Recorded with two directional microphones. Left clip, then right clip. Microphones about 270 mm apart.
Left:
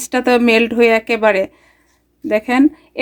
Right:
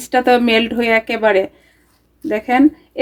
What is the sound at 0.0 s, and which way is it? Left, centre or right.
Speech, left.